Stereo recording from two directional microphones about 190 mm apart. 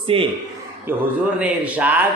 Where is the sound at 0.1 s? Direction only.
30° right (ahead or behind).